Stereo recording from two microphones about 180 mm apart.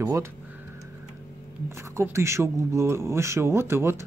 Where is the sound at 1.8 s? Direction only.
15° right (ahead or behind).